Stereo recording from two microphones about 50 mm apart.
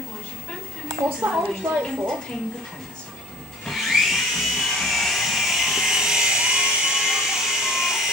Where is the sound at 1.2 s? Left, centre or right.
Right.